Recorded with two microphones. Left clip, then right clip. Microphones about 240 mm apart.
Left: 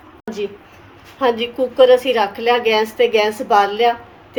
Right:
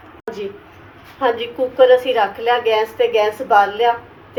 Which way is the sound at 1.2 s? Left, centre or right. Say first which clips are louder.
Left 1 dB; left.